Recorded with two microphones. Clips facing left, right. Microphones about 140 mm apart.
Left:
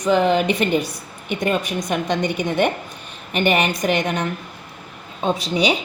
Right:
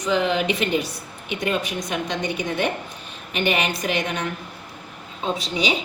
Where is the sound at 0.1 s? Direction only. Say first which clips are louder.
Left 5 dB; 50° left (ahead or behind).